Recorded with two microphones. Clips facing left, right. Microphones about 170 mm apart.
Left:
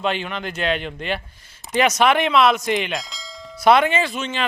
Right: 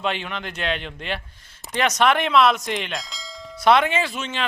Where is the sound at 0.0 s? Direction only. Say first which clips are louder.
Left 3 dB; centre (ahead or behind).